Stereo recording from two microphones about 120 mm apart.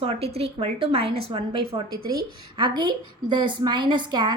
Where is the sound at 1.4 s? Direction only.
40° right (ahead or behind).